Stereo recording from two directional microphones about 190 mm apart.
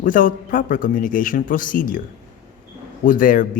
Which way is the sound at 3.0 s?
45° left (ahead or behind).